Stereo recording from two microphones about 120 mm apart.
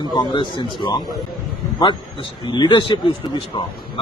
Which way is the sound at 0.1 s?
40° left (ahead or behind).